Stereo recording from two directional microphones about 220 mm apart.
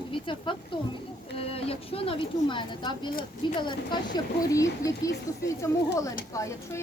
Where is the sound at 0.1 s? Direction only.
20° left (ahead or behind).